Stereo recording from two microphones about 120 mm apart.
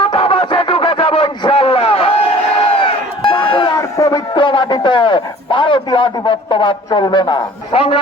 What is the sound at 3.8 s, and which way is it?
Radio, 30° left (ahead or behind).